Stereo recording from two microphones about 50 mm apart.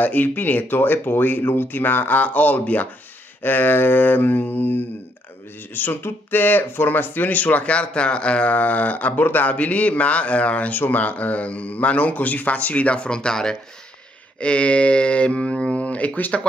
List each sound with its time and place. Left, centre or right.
0.0 s speech: left
6.0 s a man's voice: left